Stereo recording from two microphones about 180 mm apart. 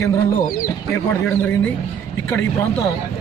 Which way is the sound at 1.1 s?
10° left (ahead or behind).